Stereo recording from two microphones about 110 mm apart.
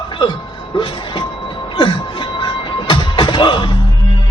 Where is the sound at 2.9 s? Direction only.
45° left (ahead or behind).